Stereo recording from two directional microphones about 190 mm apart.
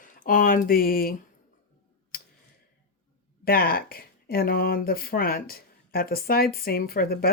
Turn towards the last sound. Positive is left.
turn(degrees=55)  # may be behind; listen again after turning